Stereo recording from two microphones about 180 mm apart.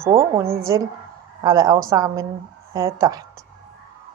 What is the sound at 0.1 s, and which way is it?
Speech, 30° right (ahead or behind).